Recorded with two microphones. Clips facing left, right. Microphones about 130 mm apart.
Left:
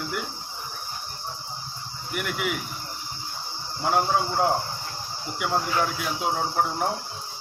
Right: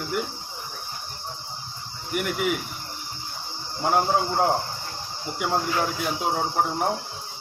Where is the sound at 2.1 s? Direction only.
45° right (ahead or behind).